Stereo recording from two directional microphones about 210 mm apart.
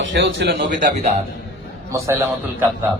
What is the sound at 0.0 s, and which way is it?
Speech, 60° right (ahead or behind).